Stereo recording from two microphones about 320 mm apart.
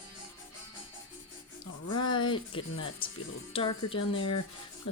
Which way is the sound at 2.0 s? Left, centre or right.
Centre.